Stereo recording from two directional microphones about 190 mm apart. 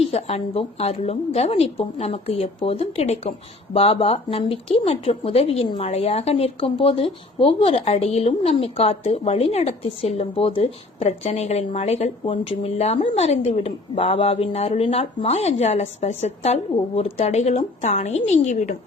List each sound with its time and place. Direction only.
0.1 s a woman's voice: 35° left (ahead or behind)